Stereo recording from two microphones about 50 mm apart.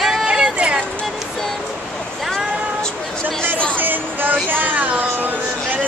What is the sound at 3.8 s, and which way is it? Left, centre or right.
Speech, right.